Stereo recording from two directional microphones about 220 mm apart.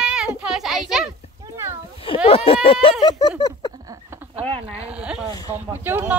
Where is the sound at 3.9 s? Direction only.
10° right (ahead or behind).